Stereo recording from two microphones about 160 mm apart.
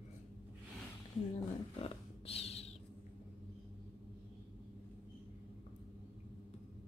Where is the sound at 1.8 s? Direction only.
40° left (ahead or behind).